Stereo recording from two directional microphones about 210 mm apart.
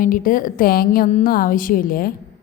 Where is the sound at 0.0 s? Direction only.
40° left (ahead or behind).